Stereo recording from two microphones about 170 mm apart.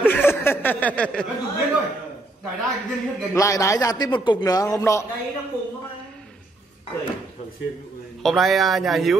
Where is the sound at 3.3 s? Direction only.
20° left (ahead or behind).